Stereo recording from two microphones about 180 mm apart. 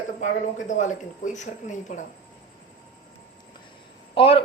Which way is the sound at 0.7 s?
45° left (ahead or behind).